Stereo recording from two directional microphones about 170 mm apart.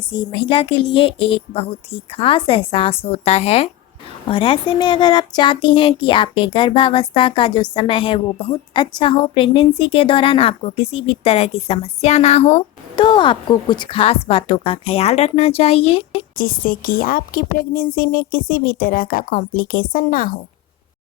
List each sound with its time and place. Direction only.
0.3 s speech: 30° left (ahead or behind)
16.4 s a woman's voice: 55° left (ahead or behind)